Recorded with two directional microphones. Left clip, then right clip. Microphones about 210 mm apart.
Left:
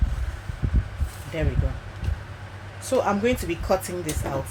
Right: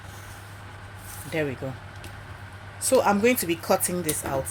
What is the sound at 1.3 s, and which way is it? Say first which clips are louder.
Speech: right 2 dB; 40° right (ahead or behind).